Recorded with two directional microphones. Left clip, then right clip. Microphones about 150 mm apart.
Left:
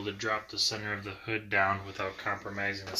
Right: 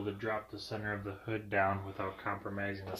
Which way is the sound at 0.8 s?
85° right.